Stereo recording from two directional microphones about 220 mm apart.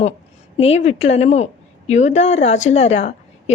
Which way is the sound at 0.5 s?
30° left (ahead or behind).